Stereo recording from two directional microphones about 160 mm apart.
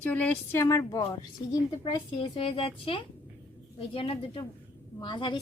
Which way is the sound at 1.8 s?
35° left (ahead or behind).